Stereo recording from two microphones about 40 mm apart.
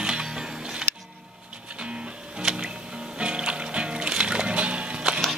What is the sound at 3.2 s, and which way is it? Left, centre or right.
Music, right.